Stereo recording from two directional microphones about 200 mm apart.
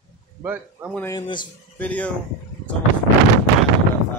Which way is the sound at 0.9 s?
15° left (ahead or behind).